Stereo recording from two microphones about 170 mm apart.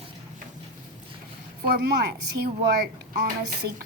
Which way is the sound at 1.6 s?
70° right (ahead or behind).